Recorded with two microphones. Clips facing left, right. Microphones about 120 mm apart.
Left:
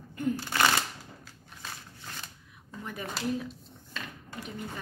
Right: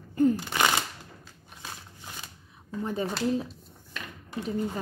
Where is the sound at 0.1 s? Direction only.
35° right (ahead or behind).